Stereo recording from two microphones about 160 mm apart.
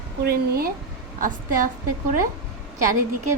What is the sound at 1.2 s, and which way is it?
Speech, 55° right (ahead or behind).